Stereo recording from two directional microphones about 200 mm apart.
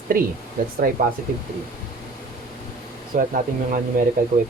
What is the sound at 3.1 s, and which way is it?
Speech, 40° right (ahead or behind).